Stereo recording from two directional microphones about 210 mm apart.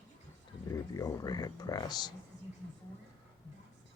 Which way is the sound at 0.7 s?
15° left (ahead or behind).